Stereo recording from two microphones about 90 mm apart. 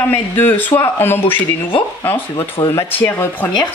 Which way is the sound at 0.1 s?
20° left (ahead or behind).